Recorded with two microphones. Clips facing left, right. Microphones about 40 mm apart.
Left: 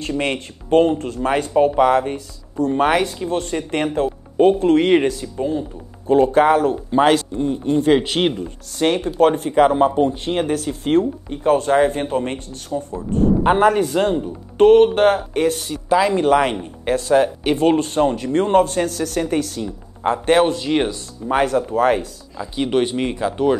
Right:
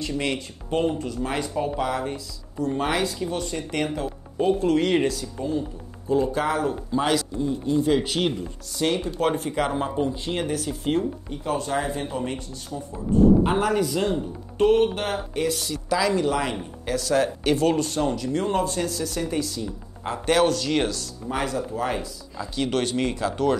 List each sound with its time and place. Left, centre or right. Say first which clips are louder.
0.2 s speech: left 5 dB; left
6.0 s speech: left 9 dB; left
16.3 s speech: left 9 dB; left
16.8 s speech: left 7 dB; left
17.2 s speech: left 4 dB; left
21.3 s speech: left 9 dB; left
22.4 s speech: left 6 dB; left